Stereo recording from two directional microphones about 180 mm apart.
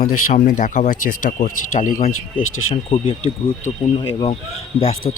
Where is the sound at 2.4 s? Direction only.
90° left.